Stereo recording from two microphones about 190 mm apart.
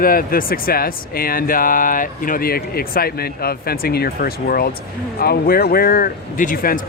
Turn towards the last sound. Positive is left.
turn(degrees=50)  # may be behind; listen again after turning